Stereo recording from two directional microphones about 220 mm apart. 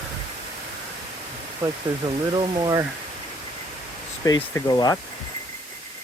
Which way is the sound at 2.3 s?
20° right (ahead or behind).